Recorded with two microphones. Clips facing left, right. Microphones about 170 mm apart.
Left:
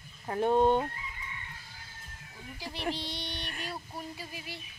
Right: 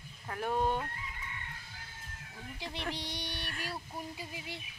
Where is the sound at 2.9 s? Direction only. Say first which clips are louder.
Left 2 dB; 15° right (ahead or behind).